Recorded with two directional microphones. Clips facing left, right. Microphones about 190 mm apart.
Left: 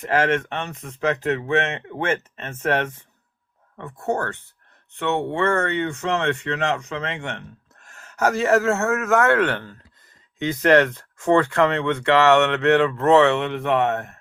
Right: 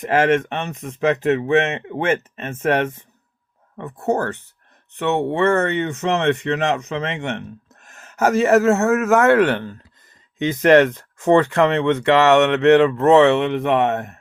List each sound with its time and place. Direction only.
0.0 s speech: 15° right (ahead or behind)
4.0 s speech: 20° right (ahead or behind)